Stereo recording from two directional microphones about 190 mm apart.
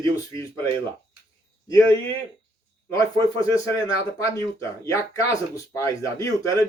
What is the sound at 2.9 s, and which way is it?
Speech, 15° left (ahead or behind).